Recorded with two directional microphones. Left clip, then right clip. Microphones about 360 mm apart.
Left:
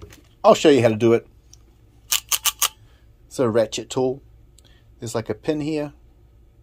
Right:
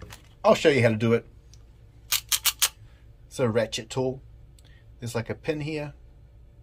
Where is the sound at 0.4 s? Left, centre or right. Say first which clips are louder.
Left 6 dB; centre.